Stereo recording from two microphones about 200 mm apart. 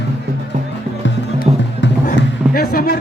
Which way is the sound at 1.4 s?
45° left (ahead or behind).